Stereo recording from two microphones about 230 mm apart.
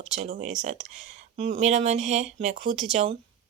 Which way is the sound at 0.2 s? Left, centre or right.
Right.